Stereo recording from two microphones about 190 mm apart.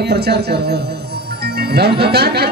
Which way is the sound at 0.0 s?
60° right (ahead or behind).